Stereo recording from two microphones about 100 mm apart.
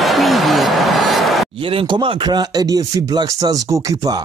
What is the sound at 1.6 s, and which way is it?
Speech, 60° right (ahead or behind).